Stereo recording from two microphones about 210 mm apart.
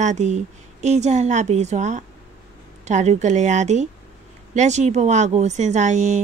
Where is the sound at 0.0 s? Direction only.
35° right (ahead or behind).